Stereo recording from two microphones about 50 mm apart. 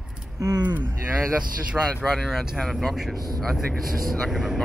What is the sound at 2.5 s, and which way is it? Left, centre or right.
Speech, centre.